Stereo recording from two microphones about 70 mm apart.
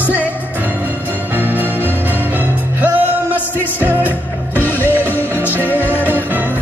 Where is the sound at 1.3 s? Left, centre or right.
Right.